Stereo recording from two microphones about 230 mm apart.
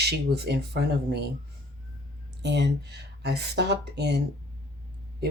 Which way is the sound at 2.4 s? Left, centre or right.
Right.